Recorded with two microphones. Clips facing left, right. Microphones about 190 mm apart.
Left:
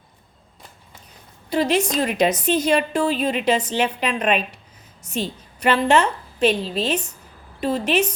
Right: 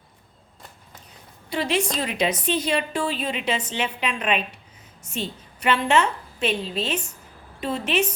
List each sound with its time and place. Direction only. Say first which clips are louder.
1.5 s a woman's voice: left 4 dB; 40° left (ahead or behind)